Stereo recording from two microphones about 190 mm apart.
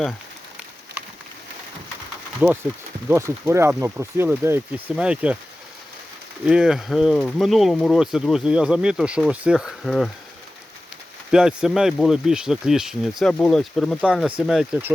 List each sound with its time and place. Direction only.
2.4 s speech: 5° right (ahead or behind)
6.4 s speech: 5° right (ahead or behind)
11.3 s speech: 5° right (ahead or behind)